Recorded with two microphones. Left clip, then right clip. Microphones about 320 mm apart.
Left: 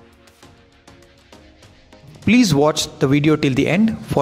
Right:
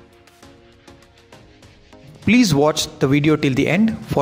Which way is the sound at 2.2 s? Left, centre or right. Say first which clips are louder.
Even; left.